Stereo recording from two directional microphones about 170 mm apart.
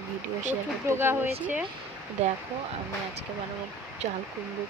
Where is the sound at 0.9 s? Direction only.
15° right (ahead or behind).